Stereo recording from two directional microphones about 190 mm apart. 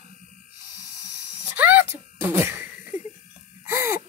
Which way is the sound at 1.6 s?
10° right (ahead or behind).